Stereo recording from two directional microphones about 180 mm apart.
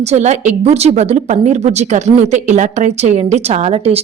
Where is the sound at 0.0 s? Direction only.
40° right (ahead or behind).